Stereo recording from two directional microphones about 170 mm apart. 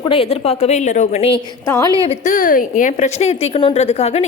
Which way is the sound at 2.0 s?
45° left (ahead or behind).